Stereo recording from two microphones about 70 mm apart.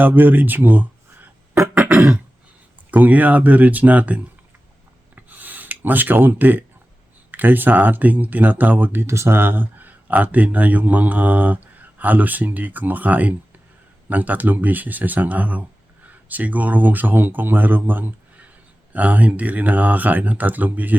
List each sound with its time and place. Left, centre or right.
0.0 s speech: right
1.9 s throat clearing: centre
2.9 s speech: right
5.1 s a sound: right
7.3 s speech: right
9.0 s speech: right